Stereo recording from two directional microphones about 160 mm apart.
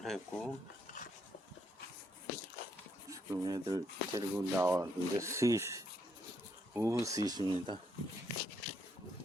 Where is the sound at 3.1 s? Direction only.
20° right (ahead or behind).